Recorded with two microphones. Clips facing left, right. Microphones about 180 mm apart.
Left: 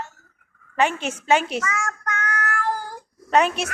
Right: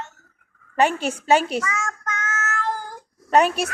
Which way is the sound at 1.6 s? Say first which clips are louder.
Left 1 dB; 20° right (ahead or behind).